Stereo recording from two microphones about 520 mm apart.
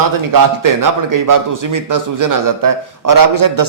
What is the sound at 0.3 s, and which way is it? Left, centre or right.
A man's voice, right.